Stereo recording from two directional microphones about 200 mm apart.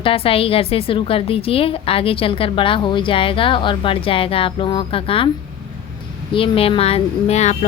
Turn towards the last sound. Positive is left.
turn(degrees=35)  # may be behind; listen again after turning